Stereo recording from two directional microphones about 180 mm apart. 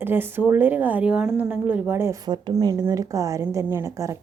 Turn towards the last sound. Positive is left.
turn(degrees=-15)  # may be behind; listen again after turning